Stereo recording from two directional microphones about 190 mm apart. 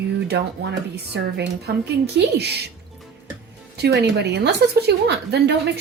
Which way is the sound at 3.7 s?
60° right (ahead or behind).